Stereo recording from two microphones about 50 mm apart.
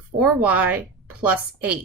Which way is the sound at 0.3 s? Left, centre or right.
Right.